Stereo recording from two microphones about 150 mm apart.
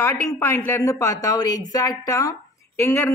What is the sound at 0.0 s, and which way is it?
Speech, 20° left (ahead or behind).